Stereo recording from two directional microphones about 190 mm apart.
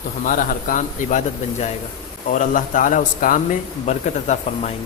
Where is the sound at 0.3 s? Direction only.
45° left (ahead or behind).